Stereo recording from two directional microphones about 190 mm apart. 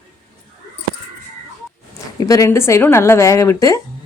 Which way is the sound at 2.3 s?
15° left (ahead or behind).